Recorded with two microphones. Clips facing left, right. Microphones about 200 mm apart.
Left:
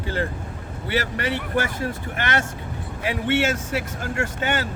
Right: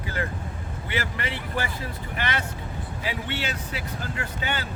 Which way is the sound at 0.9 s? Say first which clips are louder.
Left 6 dB; 40° left (ahead or behind).